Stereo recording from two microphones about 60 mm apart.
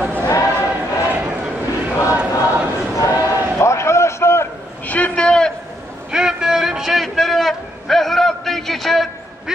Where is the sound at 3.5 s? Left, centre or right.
Left.